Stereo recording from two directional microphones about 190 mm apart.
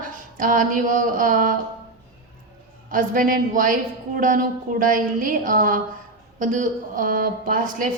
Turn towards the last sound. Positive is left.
turn(degrees=-50)  # may be behind; listen again after turning